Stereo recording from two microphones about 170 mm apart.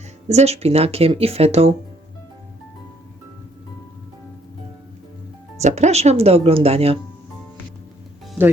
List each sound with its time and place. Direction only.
0.3 s speech: 40° right (ahead or behind)
5.5 s speech: 40° right (ahead or behind)